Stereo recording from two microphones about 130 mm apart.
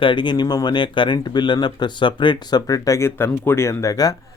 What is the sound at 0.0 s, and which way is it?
Speech, 35° left (ahead or behind).